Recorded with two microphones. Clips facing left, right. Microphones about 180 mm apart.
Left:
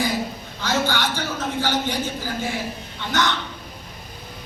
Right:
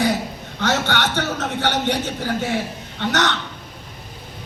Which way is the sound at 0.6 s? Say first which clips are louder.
Right 2 dB; 70° right (ahead or behind).